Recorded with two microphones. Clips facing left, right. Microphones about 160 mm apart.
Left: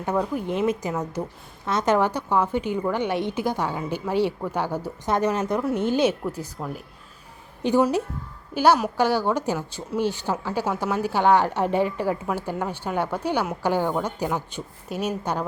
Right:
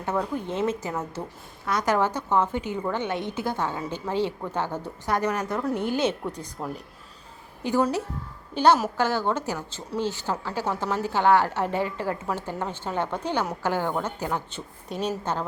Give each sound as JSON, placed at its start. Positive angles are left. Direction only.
{"t": 0.0, "sound": "a woman's voice", "side_deg": 10}
{"t": 5.0, "sound": "a woman's voice", "side_deg": 20}
{"t": 6.1, "sound": "a woman's voice", "side_deg": 5}
{"t": 7.6, "sound": "a woman's voice", "side_deg": 20}